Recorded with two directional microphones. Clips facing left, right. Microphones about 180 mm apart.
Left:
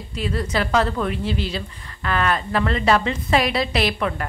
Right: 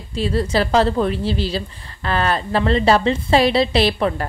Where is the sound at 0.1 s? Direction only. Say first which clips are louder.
Right 5 dB; 30° right (ahead or behind).